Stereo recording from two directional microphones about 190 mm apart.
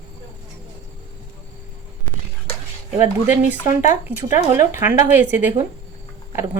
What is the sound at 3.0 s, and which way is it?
Speech, 10° right (ahead or behind).